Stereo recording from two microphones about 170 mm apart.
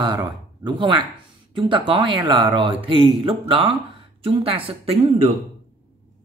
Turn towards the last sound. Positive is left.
turn(degrees=-35)  # may be behind; listen again after turning